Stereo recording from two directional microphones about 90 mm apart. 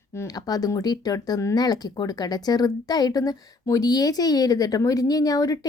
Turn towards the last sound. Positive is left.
turn(degrees=40)  # may be behind; listen again after turning